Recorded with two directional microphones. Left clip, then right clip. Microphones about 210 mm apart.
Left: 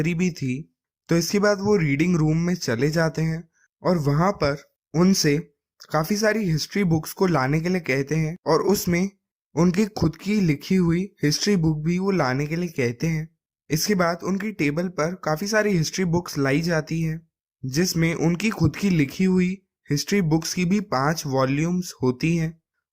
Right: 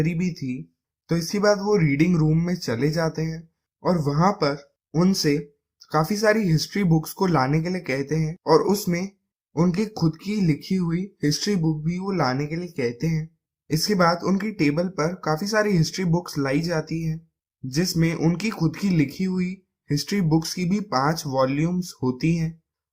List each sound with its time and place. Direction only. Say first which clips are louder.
0.0 s speech: left 2 dB; 35° left (ahead or behind)